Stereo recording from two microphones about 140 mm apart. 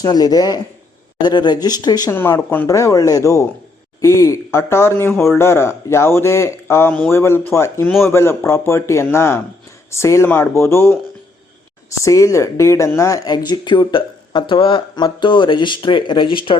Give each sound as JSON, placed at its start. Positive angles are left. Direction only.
{"t": 0.0, "sound": "speech", "side_deg": 30}
{"t": 2.1, "sound": "speech", "side_deg": 15}